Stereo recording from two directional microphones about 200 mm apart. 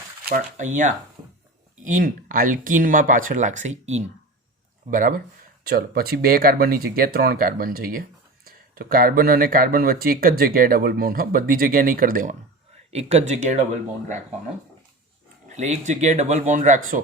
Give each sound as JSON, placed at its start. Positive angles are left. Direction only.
{"t": 0.3, "sound": "speech", "side_deg": -40}
{"t": 15.4, "sound": "speech", "side_deg": -35}